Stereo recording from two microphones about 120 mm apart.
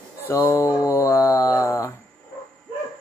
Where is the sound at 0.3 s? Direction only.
20° left (ahead or behind).